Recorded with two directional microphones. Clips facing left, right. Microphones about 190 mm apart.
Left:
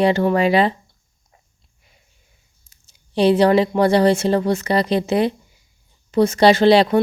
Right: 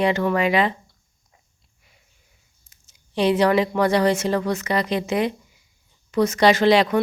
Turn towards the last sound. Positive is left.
turn(degrees=30)  # may be behind; listen again after turning